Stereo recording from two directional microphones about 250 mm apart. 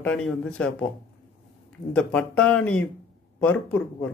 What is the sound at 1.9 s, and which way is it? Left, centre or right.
A man's voice, centre.